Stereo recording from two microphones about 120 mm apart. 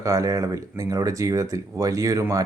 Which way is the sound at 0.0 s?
25° right (ahead or behind).